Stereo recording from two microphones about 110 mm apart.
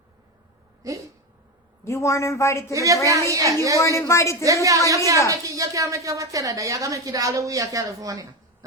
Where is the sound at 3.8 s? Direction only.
30° left (ahead or behind).